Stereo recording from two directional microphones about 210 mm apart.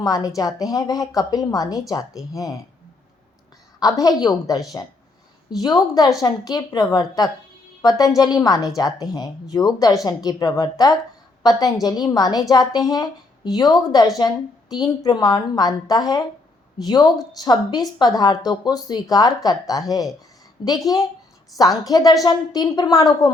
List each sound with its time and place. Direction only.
0.0 s a woman's voice: 20° left (ahead or behind)
3.8 s a woman's voice: 20° left (ahead or behind)